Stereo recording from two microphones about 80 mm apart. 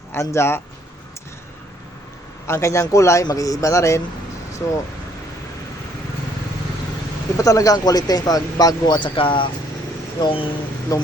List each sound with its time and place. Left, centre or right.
0.2 s speech: left
2.5 s speech: left
7.3 s speech: left
9.0 s speech: left
10.9 s speech: left